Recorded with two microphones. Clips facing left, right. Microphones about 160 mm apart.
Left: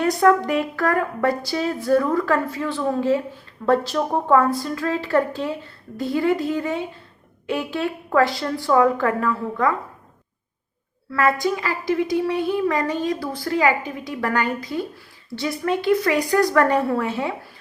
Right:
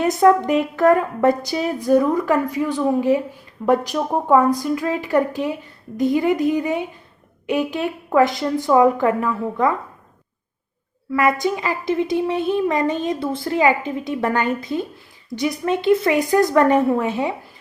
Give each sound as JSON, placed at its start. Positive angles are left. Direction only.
{"t": 0.0, "sound": "a woman's voice", "side_deg": -20}
{"t": 11.1, "sound": "a woman's voice", "side_deg": -15}